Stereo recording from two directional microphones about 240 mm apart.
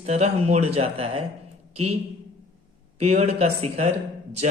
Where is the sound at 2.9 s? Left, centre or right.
Right.